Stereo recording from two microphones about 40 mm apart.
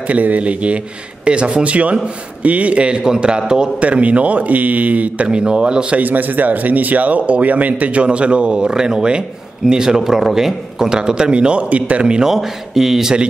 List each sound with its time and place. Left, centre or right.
0.1 s speech: right
3.8 s speech: right
5.3 s speech: right
5.9 s speech: right
12.3 s a man's voice: centre